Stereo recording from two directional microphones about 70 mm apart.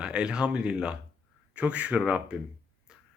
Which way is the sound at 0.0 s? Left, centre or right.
Centre.